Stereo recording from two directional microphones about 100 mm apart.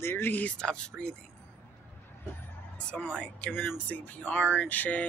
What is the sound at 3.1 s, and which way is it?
Speech, 15° left (ahead or behind).